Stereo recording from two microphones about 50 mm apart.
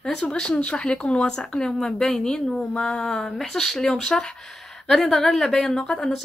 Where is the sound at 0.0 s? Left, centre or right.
Centre.